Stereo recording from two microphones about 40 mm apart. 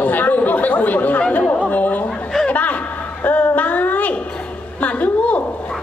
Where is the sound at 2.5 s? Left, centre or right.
Left.